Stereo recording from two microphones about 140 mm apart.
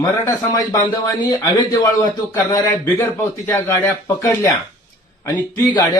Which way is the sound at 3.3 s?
20° left (ahead or behind).